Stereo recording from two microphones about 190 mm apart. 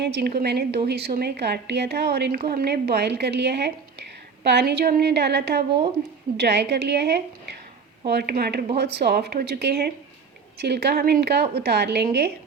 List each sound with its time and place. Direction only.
0.0 s a woman's voice: 60° right (ahead or behind)